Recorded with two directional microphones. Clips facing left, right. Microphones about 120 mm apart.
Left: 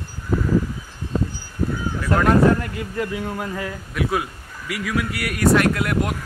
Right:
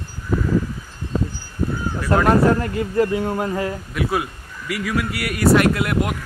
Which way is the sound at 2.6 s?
35° right (ahead or behind).